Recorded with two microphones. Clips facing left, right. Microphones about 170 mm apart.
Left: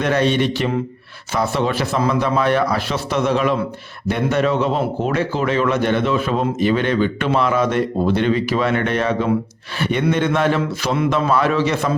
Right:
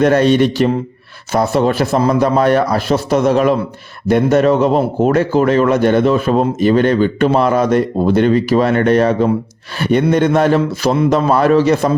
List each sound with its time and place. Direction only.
0.0 s a man's voice: 45° right (ahead or behind)